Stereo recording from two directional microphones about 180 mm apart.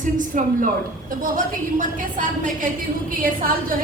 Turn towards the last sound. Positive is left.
turn(degrees=-50)  # may be behind; listen again after turning